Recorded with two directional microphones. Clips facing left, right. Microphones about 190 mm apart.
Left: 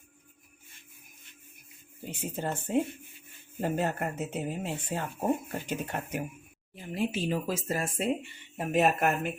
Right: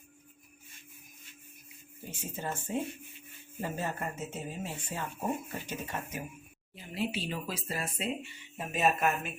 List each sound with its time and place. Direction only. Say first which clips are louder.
2.0 s speech: left 4 dB; 60° left (ahead or behind)
6.7 s speech: left 4 dB; 50° left (ahead or behind)
8.5 s speech: left 4 dB; 60° left (ahead or behind)